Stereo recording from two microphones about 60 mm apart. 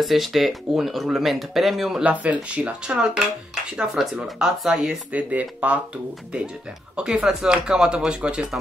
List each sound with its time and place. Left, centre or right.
0.0 s speech: centre
2.2 s speech: right
3.9 s speech: centre
5.1 s speech: right
7.0 s speech: centre